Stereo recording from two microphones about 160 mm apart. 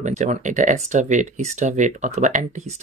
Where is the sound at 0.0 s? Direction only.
45° right (ahead or behind).